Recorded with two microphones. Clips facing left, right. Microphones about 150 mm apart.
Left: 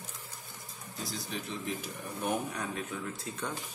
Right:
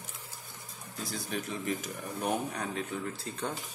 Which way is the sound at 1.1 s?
50° right (ahead or behind).